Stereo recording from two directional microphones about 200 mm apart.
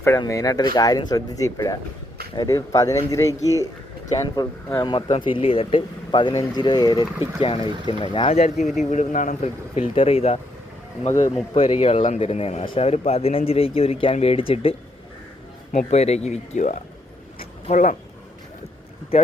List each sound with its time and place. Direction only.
0.0 s a man's voice: 15° left (ahead or behind); by 10.4 s 30° left (ahead or behind)
11.5 s a man's voice: 30° left (ahead or behind)